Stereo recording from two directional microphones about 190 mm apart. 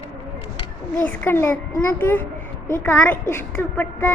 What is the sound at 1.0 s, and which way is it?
Speech, 10° left (ahead or behind).